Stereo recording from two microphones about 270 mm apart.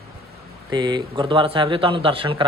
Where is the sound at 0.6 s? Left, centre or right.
Centre.